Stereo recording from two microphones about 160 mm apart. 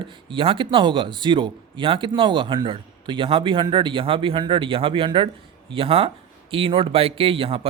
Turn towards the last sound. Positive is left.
turn(degrees=-35)  # may be behind; listen again after turning